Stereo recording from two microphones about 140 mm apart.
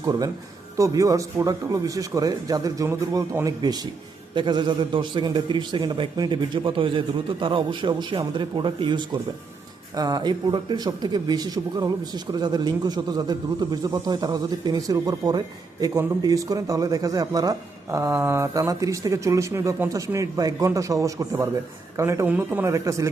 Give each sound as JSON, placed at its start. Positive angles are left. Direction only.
{"t": 0.0, "sound": "a man's voice", "side_deg": -25}